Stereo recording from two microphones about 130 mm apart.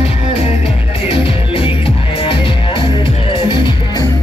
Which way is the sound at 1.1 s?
45° left (ahead or behind).